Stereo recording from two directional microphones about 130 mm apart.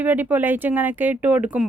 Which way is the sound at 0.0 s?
15° right (ahead or behind).